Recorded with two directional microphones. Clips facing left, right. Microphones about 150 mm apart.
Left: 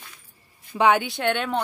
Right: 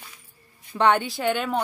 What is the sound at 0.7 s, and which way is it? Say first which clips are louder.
Speech: left 1 dB; 5° left (ahead or behind).